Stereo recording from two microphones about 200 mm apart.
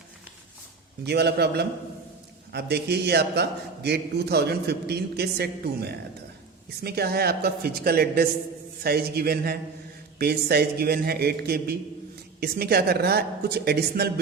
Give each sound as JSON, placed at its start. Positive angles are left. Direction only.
{"t": 1.0, "sound": "a man's voice", "side_deg": -55}